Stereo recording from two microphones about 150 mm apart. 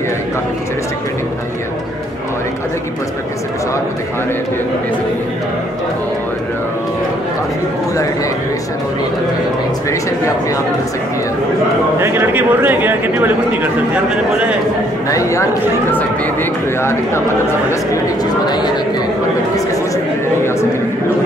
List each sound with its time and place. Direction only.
12.0 s a man's voice: 15° right (ahead or behind)
15.0 s speech: 20° left (ahead or behind)
18.4 s speech: 30° left (ahead or behind)